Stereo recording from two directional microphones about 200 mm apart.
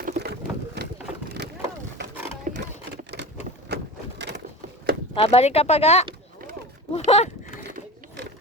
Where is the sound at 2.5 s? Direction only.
40° right (ahead or behind).